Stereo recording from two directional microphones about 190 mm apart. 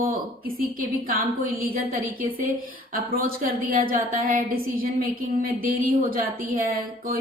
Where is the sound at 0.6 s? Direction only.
50° right (ahead or behind).